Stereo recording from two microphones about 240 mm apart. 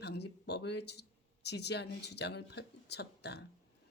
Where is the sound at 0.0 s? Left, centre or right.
Left.